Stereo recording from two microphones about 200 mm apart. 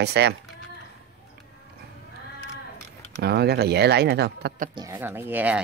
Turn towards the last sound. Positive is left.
turn(degrees=-10)  # may be behind; listen again after turning